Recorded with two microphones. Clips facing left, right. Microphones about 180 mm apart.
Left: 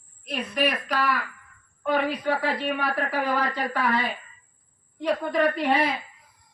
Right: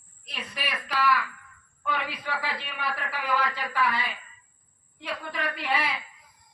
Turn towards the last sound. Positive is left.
turn(degrees=45)  # may be behind; listen again after turning